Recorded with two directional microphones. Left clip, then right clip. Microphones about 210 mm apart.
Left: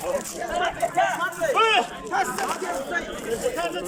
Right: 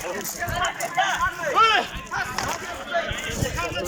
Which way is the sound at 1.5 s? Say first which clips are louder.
Right 2 dB; 10° left (ahead or behind).